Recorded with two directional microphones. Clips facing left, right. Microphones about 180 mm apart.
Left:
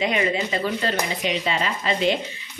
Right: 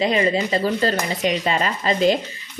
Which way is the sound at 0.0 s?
35° right (ahead or behind).